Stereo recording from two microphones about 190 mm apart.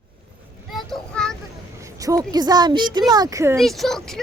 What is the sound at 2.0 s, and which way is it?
Speech, 20° right (ahead or behind).